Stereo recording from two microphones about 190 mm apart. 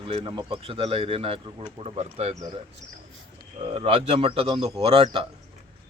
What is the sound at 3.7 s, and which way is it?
A man's voice, 30° right (ahead or behind).